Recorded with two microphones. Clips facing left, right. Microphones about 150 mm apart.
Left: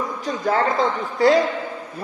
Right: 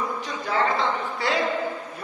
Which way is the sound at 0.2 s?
45° left (ahead or behind).